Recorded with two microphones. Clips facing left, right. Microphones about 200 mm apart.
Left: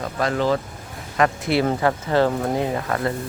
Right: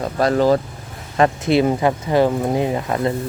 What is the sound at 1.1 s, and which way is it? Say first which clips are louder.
Speech: right 4 dB; 25° right (ahead or behind).